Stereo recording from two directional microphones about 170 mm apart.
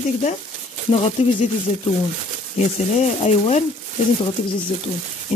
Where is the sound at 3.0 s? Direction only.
40° left (ahead or behind).